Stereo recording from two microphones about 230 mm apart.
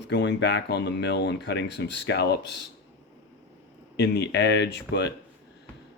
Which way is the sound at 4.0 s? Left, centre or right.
Left.